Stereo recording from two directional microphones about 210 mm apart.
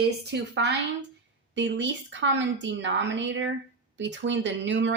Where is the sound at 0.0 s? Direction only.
55° right (ahead or behind).